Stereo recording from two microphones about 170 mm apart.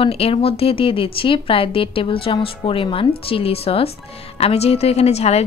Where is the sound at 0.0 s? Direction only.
35° left (ahead or behind).